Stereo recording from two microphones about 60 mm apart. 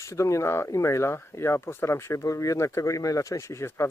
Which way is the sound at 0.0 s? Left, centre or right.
Left.